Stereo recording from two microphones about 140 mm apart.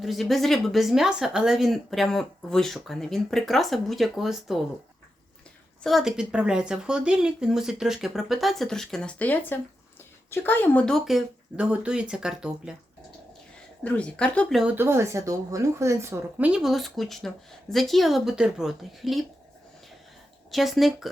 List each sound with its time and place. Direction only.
0.0 s speech: centre (ahead or behind)
5.8 s speech: centre (ahead or behind)
13.8 s a woman's voice: 10° left (ahead or behind)
14.5 s speech: 5° right (ahead or behind)
14.8 s a woman's voice: 20° right (ahead or behind)
16.5 s speech: centre (ahead or behind)
20.5 s speech: centre (ahead or behind)